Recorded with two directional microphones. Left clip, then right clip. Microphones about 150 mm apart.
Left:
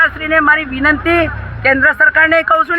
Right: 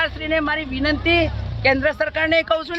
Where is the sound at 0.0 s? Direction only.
25° right (ahead or behind).